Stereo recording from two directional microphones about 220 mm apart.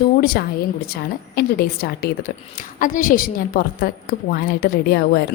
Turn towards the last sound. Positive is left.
turn(degrees=50)  # may be behind; listen again after turning